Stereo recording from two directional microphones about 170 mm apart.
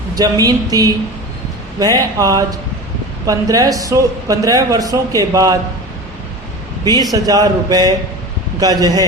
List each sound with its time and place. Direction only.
0.1 s speech: 20° right (ahead or behind)
6.8 s speech: 25° right (ahead or behind)